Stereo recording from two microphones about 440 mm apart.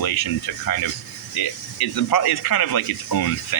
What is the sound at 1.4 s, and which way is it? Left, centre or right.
Speech, left.